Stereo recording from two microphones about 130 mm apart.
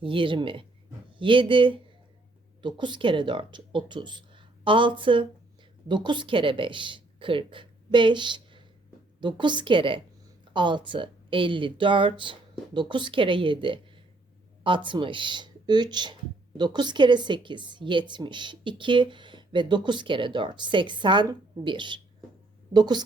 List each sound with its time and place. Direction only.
0.0 s a woman's voice: 40° right (ahead or behind)